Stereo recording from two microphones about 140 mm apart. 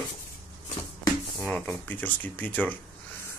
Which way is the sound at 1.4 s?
10° left (ahead or behind).